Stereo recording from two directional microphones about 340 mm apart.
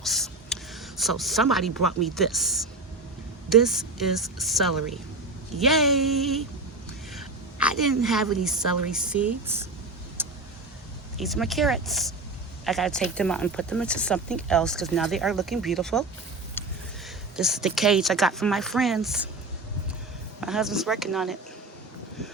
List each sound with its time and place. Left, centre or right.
0.0 s a sound: centre
3.5 s speech: centre
7.6 s speech: centre
10.2 s vehicle: centre
11.2 s speech: centre
16.6 s a sound: centre
17.3 s speech: centre
20.4 s speech: centre